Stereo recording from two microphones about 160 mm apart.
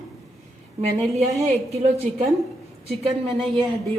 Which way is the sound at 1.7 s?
40° right (ahead or behind).